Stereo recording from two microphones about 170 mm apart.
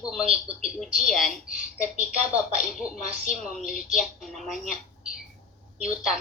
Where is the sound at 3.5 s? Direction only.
Centre (ahead or behind).